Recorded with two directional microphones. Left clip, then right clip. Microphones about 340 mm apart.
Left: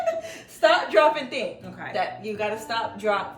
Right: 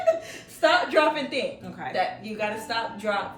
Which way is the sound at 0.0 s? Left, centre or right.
Centre.